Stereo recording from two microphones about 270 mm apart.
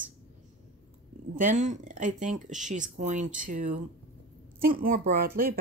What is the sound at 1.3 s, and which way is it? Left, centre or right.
Speech, right.